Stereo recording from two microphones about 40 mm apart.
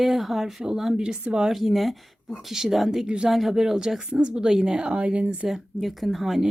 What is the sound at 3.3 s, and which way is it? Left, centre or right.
Speech, centre.